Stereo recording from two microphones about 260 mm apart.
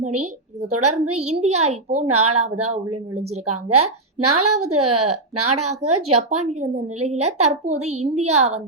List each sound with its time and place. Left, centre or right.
0.7 s a woman's voice: right
1.2 s a child's voice: right
2.0 s a woman's voice: right
3.4 s a woman's voice: right
6.6 s a child's voice: right